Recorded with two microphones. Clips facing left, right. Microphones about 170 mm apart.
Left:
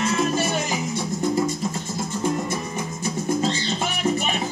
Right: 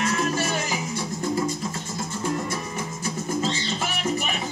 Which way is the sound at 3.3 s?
25° left (ahead or behind).